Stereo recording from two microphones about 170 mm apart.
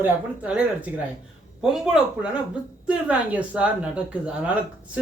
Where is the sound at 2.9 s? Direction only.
5° right (ahead or behind).